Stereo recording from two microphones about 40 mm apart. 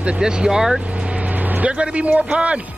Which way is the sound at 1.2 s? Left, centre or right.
Right.